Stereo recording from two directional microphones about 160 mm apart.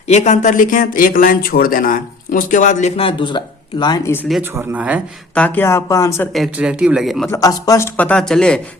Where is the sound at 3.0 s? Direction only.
30° left (ahead or behind); by 4.3 s 15° left (ahead or behind).